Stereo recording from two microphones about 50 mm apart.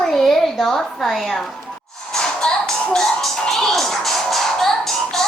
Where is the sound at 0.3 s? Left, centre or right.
Centre.